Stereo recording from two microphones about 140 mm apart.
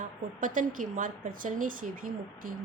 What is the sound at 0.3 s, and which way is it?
A woman's voice, 70° right (ahead or behind).